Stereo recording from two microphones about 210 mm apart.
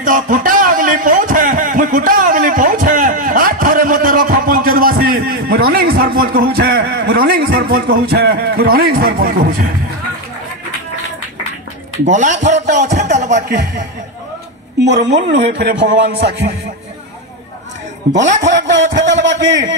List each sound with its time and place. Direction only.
0.0 s a sound: 40° right (ahead or behind)
12.0 s speech: 35° right (ahead or behind)
14.9 s a man's voice: 55° right (ahead or behind)
18.3 s a man's voice: 35° right (ahead or behind)
18.9 s a man's voice: 60° right (ahead or behind)